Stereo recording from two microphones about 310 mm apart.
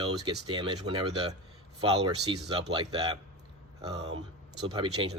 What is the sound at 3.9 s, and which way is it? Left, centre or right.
Speech, right.